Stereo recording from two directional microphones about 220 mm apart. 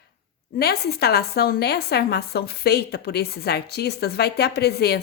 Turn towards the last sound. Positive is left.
turn(degrees=45)  # may be behind; listen again after turning